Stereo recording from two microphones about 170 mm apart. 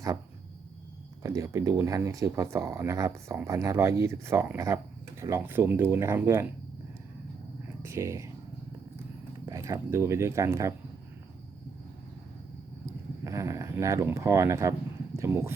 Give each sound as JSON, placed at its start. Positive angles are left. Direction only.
{"t": 1.2, "sound": "speech", "side_deg": -20}
{"t": 7.8, "sound": "a sound", "side_deg": -15}
{"t": 9.5, "sound": "speech", "side_deg": -20}
{"t": 13.2, "sound": "speech", "side_deg": -15}